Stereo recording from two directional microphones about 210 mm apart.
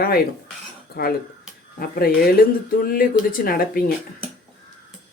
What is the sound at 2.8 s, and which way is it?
Speech, 45° left (ahead or behind).